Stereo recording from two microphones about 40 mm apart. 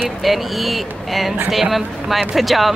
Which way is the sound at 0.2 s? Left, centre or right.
Centre.